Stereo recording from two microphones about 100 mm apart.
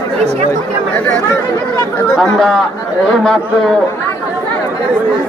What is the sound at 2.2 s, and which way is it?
Speech, centre (ahead or behind).